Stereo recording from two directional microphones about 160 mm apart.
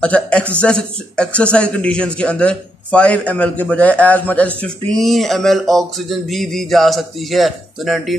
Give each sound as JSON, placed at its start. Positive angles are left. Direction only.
{"t": 0.0, "sound": "a man's voice", "side_deg": 5}